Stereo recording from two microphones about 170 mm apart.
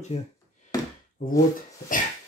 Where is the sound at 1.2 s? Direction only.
50° left (ahead or behind).